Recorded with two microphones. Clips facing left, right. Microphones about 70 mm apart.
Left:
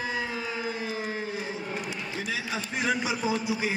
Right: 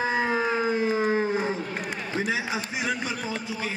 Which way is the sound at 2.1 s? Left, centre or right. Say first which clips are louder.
Right 6 dB; right.